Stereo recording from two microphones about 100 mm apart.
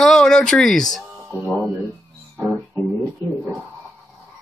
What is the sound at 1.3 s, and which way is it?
Speech, 20° right (ahead or behind).